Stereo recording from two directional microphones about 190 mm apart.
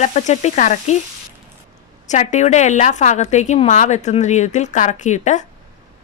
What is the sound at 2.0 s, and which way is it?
A woman's voice, 40° left (ahead or behind).